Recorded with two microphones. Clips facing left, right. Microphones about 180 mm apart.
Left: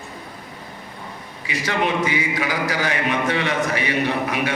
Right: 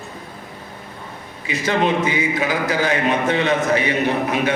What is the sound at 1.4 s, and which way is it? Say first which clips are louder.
A man's voice: right 4 dB; 25° right (ahead or behind).